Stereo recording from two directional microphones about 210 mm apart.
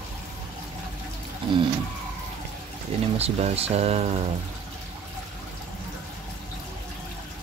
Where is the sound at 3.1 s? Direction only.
30° right (ahead or behind).